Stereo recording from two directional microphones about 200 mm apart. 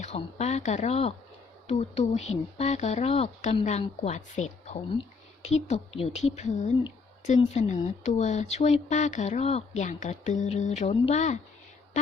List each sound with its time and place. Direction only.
0.0 s speech: 35° left (ahead or behind)